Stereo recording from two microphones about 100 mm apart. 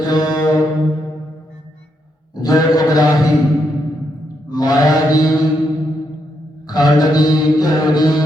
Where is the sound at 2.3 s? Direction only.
40° left (ahead or behind).